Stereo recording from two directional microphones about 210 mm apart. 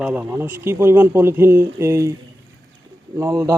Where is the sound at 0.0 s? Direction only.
5° right (ahead or behind).